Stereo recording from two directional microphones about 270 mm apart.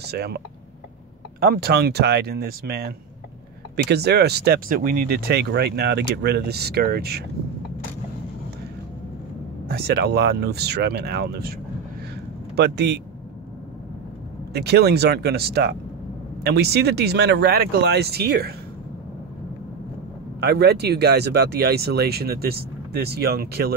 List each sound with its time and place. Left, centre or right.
0.0 s speech: right
1.4 s speech: right
9.7 s speech: right
12.5 s speech: right
14.5 s speech: right
20.3 s speech: right